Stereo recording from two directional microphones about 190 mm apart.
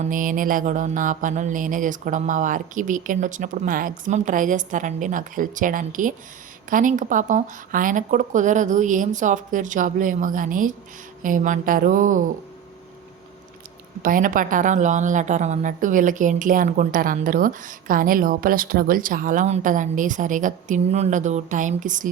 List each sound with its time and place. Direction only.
0.1 s a woman's voice: 45° right (ahead or behind)
14.0 s a woman's voice: 45° right (ahead or behind)